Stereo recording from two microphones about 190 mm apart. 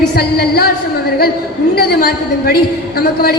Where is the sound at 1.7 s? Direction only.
55° left (ahead or behind).